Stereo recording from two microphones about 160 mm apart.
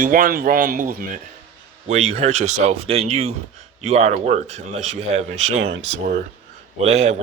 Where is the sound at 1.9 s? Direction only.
40° right (ahead or behind).